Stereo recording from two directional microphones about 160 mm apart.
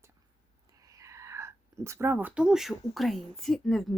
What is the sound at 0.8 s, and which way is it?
Speech, 20° right (ahead or behind).